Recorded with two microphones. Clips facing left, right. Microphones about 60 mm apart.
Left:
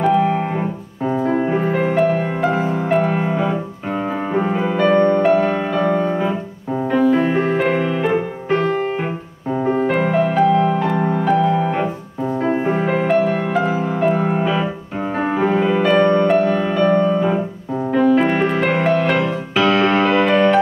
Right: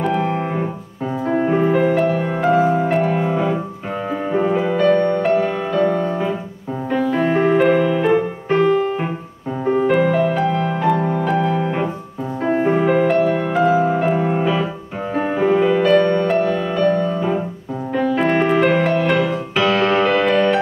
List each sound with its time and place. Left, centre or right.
1.2 s music: centre; by 6.1 s left
6.9 s music: centre
9.9 s music: centre
17.9 s music: centre